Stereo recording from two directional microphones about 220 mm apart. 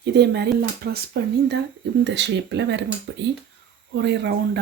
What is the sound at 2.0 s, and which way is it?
Speech, 50° right (ahead or behind).